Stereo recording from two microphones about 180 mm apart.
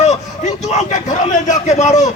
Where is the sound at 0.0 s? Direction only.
40° left (ahead or behind).